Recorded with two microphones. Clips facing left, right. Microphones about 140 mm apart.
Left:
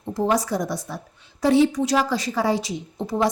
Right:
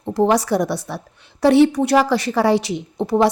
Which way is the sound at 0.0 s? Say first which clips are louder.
Right 5 dB; 70° right (ahead or behind).